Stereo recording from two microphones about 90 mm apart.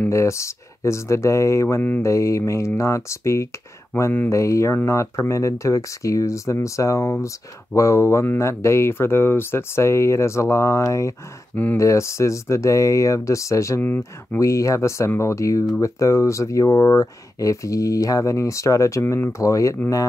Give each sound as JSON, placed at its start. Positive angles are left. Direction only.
{"t": 0.1, "sound": "speech", "side_deg": 35}
{"t": 1.8, "sound": "speech", "side_deg": 20}
{"t": 2.0, "sound": "speech", "side_deg": 35}
{"t": 3.9, "sound": "speech", "side_deg": 20}
{"t": 4.3, "sound": "speech", "side_deg": 35}
{"t": 13.7, "sound": "speech", "side_deg": 20}
{"t": 14.4, "sound": "speech", "side_deg": 35}